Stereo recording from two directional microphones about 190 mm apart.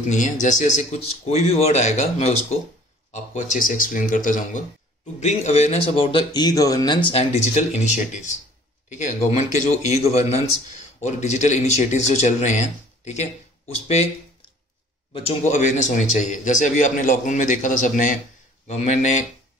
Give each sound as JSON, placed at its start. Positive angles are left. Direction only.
{"t": 0.1, "sound": "a man's voice", "side_deg": 40}
{"t": 15.1, "sound": "a man's voice", "side_deg": 35}